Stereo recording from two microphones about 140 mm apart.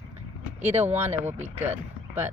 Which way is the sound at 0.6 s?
15° right (ahead or behind).